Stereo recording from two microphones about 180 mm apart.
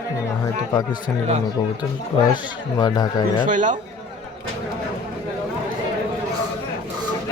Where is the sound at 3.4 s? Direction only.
45° right (ahead or behind).